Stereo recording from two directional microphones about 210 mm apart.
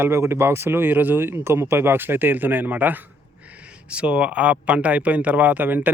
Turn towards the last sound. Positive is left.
turn(degrees=-10)  # may be behind; listen again after turning